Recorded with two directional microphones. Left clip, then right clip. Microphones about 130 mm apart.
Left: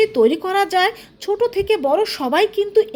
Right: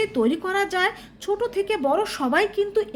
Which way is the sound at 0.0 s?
30° left (ahead or behind).